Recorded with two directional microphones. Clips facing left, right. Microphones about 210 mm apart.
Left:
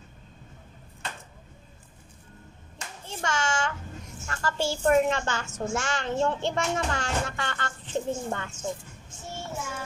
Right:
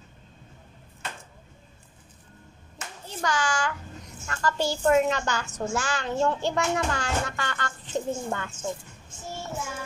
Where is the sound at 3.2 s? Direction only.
25° left (ahead or behind).